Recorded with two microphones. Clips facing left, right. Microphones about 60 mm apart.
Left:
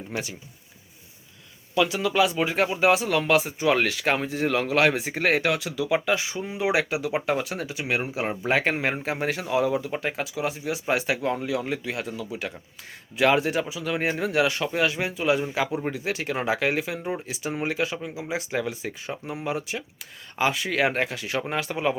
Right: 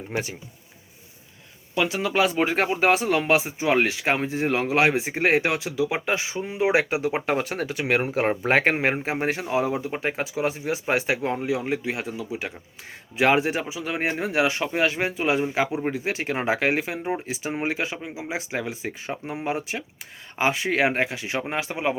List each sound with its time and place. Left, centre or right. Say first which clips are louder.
0.1 s speech: right 3 dB; right
1.7 s speech: left 1 dB; right